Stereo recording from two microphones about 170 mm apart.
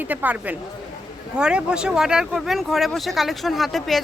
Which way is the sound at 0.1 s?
10° right (ahead or behind).